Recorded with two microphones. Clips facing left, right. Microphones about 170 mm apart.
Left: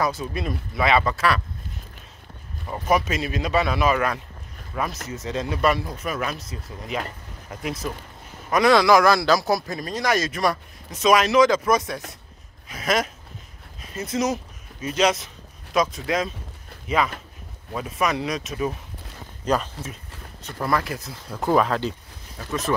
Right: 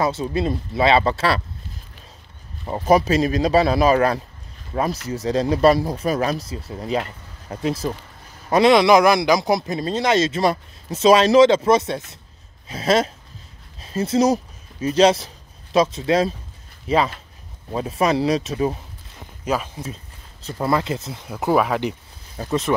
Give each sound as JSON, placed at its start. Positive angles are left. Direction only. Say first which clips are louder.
{"t": 0.0, "sound": "a man's voice", "louder": "right 4 dB", "side_deg": -25}
{"t": 2.6, "sound": "a man's voice", "louder": "right 5 dB", "side_deg": -30}
{"t": 19.4, "sound": "speech", "louder": "even", "side_deg": -10}
{"t": 20.4, "sound": "a man's voice", "louder": "right 4 dB", "side_deg": -25}
{"t": 21.3, "sound": "speech", "louder": "right 1 dB", "side_deg": -10}
{"t": 22.4, "sound": "speech", "louder": "right 7 dB", "side_deg": -35}